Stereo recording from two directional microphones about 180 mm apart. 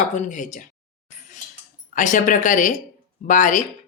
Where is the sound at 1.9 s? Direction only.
45° left (ahead or behind).